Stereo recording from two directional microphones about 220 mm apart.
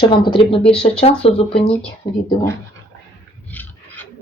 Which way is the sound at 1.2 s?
25° left (ahead or behind).